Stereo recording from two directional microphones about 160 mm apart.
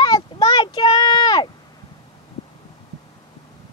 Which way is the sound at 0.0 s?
25° left (ahead or behind).